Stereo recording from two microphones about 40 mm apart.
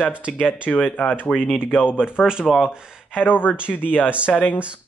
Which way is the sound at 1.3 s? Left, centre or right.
Centre.